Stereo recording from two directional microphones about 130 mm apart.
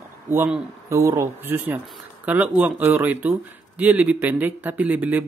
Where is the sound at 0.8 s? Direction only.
20° right (ahead or behind).